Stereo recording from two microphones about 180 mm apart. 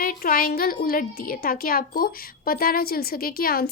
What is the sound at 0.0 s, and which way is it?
A woman's voice, 55° left (ahead or behind).